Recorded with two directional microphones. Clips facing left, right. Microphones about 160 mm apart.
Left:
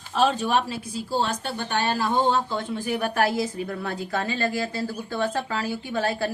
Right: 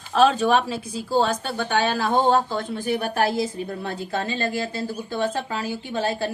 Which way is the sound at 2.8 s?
30° right (ahead or behind).